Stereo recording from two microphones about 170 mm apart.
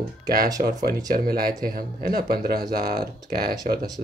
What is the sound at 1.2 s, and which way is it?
Speech, 60° right (ahead or behind).